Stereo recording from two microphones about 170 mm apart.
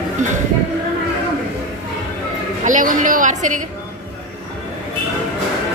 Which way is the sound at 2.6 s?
50° right (ahead or behind).